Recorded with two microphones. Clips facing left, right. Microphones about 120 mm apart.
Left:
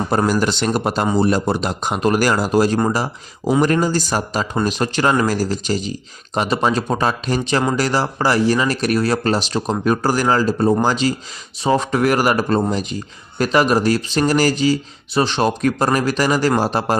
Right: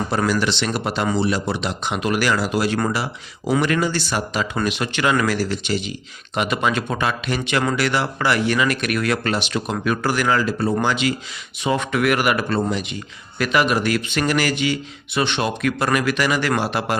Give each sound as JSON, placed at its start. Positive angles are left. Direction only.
{"t": 0.1, "sound": "speech", "side_deg": 45}